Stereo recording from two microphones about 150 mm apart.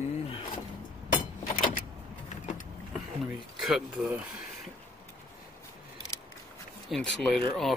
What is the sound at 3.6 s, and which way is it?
Speech, 5° right (ahead or behind).